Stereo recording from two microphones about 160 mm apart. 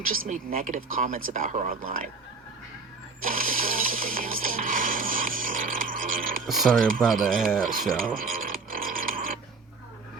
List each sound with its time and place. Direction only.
0.1 s speech: 60° right (ahead or behind)
3.2 s music: 60° right (ahead or behind)
6.4 s speech: centre (ahead or behind)
7.6 s a sound: 60° right (ahead or behind)